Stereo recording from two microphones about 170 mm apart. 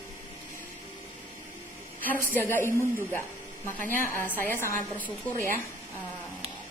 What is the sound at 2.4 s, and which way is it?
Speech, 15° left (ahead or behind).